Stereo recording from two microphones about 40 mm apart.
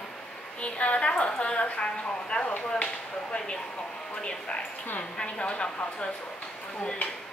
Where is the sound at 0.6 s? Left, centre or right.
Left.